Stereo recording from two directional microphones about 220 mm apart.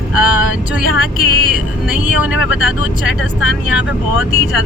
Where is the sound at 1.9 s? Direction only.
5° right (ahead or behind).